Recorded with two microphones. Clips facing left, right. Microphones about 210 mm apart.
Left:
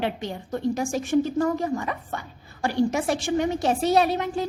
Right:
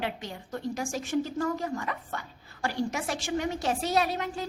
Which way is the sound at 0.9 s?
55° left (ahead or behind).